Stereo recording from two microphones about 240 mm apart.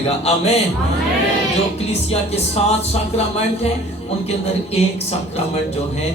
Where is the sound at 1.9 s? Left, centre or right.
Left.